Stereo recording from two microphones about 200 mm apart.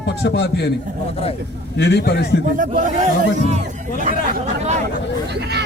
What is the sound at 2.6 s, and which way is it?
Speech, 40° right (ahead or behind).